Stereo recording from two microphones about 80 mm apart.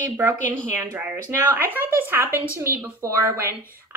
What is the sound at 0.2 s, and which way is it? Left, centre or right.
Speech, right.